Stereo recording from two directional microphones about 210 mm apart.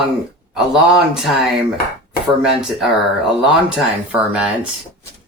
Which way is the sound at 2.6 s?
Centre (ahead or behind).